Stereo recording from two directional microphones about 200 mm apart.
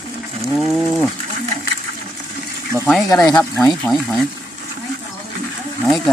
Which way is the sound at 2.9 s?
Centre (ahead or behind).